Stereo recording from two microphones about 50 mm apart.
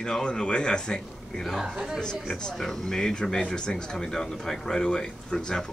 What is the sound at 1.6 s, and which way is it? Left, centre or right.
Speech, centre.